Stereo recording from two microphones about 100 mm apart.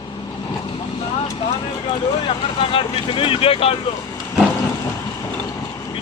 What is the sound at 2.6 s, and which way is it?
Speech, 65° left (ahead or behind).